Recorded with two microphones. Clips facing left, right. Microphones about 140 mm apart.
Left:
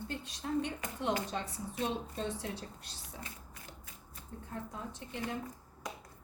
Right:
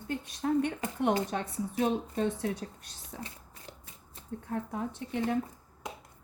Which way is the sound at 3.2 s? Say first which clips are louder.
Right 5 dB; 30° right (ahead or behind).